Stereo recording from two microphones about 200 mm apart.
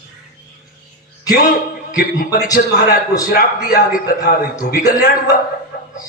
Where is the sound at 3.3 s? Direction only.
45° left (ahead or behind).